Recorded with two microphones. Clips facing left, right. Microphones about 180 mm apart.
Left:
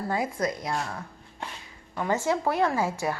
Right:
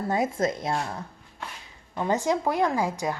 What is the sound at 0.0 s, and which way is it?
A woman's voice, 25° right (ahead or behind).